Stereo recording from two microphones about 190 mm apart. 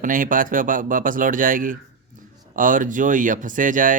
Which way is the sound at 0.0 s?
45° right (ahead or behind).